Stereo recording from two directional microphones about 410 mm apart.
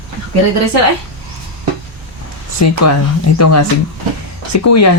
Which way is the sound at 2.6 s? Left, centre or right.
Left.